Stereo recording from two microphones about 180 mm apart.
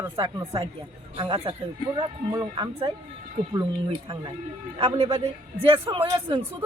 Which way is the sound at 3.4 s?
45° right (ahead or behind).